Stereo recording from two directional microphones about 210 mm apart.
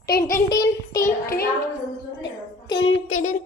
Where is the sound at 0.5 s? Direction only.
15° left (ahead or behind).